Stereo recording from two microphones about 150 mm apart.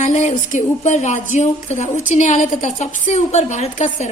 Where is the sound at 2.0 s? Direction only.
55° left (ahead or behind).